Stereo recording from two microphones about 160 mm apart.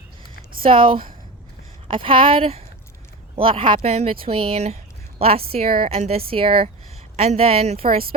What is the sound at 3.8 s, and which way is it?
Speech, 45° right (ahead or behind).